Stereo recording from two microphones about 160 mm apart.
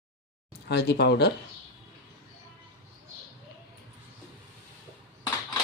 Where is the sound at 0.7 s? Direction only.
90° left.